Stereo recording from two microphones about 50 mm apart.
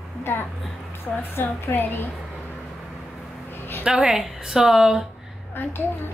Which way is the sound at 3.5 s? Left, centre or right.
Left.